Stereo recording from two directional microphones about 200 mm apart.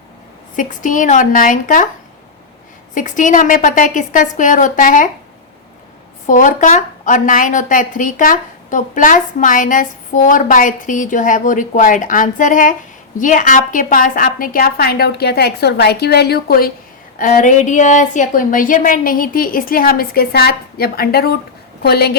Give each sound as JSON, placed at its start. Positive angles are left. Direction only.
{"t": 0.5, "sound": "a woman's voice", "side_deg": 40}
{"t": 2.9, "sound": "a woman's voice", "side_deg": 40}
{"t": 6.2, "sound": "a woman's voice", "side_deg": 40}